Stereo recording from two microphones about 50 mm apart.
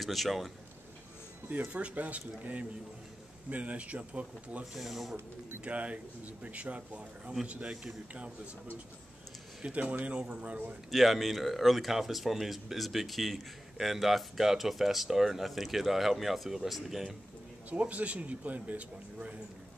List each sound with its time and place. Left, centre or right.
0.0 s speech: centre
1.7 s speech: right
4.7 s speech: centre
5.6 s speech: right
9.6 s speech: right
10.9 s speech: centre
17.6 s speech: right